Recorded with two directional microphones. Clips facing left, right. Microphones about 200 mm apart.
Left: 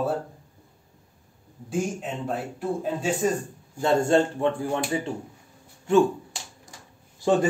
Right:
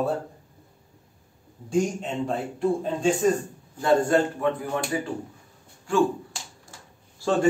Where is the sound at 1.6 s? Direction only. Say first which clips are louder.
Right 3 dB; 5° left (ahead or behind).